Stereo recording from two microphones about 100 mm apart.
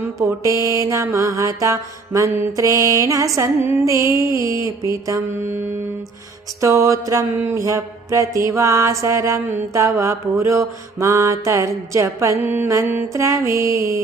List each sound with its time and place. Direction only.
0.0 s mantra: 30° right (ahead or behind)